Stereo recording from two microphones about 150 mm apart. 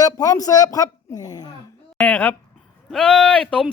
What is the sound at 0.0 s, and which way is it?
Speech, 25° left (ahead or behind).